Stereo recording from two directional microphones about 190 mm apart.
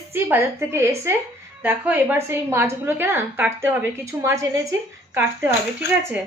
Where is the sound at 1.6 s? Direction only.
10° right (ahead or behind).